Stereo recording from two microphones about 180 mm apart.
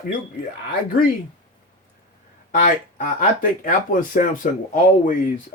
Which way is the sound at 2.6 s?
45° left (ahead or behind).